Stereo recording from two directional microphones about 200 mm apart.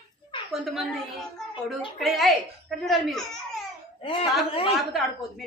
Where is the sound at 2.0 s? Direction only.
Centre (ahead or behind).